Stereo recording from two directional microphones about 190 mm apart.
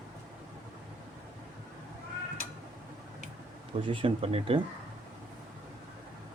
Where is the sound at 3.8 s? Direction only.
30° right (ahead or behind).